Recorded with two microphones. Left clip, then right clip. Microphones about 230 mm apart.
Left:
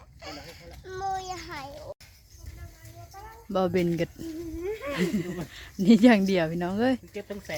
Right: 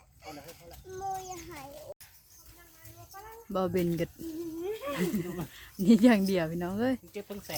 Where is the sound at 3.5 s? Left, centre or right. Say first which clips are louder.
Left 4 dB; centre.